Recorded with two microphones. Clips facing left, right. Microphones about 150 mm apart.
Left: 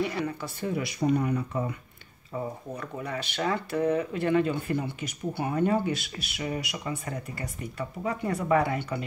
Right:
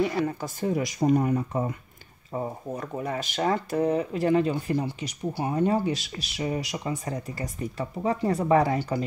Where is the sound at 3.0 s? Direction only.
45° right (ahead or behind).